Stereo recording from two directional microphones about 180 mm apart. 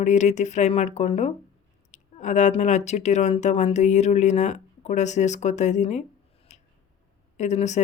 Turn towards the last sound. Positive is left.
turn(degrees=40)  # may be behind; listen again after turning